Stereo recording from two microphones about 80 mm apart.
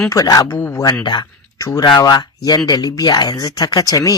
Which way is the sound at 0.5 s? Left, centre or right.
Left.